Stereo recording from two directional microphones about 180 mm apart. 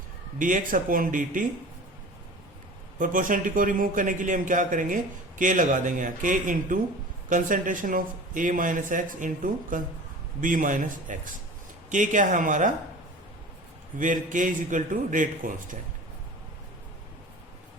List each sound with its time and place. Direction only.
0.3 s a man's voice: 45° right (ahead or behind)
3.0 s a man's voice: 50° right (ahead or behind)
14.0 s a man's voice: 45° right (ahead or behind)